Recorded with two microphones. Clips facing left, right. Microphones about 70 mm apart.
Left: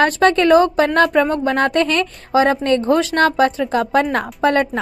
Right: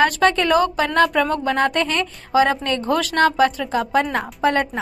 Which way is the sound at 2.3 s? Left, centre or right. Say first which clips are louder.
Left 3 dB; left.